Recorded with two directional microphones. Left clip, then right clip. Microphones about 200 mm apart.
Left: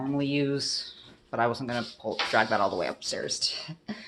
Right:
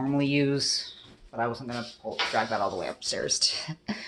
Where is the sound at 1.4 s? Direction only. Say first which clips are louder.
Left 3 dB; 45° left (ahead or behind).